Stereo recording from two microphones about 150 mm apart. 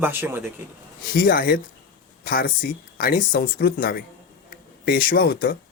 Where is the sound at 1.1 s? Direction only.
75° left (ahead or behind).